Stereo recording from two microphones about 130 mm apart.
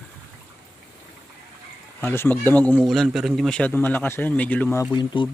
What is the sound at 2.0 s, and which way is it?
Speech, 15° left (ahead or behind).